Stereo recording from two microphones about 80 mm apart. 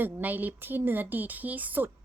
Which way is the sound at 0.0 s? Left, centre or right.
Right.